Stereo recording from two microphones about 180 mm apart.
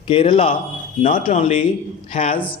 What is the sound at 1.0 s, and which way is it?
Speech, 45° left (ahead or behind).